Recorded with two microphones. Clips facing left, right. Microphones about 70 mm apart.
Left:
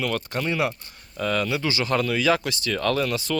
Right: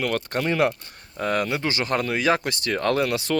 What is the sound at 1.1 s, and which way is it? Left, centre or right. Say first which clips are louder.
Speech: right 1 dB; right.